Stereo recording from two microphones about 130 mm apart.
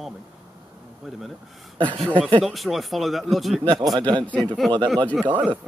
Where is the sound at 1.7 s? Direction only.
45° right (ahead or behind).